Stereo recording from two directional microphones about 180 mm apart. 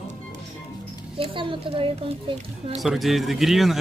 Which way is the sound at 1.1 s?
30° right (ahead or behind).